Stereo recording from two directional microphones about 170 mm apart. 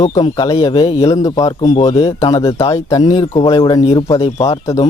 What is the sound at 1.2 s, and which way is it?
A man's voice, 20° left (ahead or behind).